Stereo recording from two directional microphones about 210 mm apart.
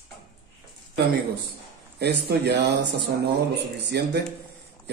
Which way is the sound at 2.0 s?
50° right (ahead or behind).